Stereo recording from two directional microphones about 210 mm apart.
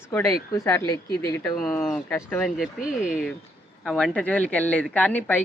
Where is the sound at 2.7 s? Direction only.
40° left (ahead or behind).